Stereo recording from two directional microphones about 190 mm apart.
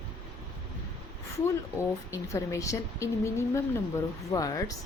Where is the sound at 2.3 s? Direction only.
15° left (ahead or behind).